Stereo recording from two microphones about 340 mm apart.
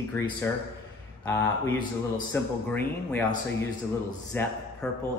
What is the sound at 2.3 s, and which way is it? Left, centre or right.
Speech, centre.